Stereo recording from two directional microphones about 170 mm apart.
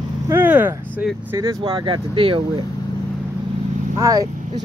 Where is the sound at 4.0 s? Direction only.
20° right (ahead or behind).